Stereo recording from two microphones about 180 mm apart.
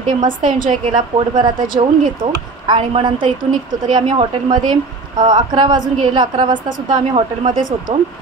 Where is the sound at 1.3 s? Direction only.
25° right (ahead or behind).